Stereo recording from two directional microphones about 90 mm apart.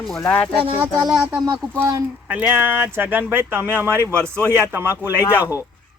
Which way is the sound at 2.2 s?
20° right (ahead or behind).